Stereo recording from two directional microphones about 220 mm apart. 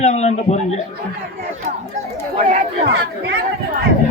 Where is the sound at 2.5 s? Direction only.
40° right (ahead or behind).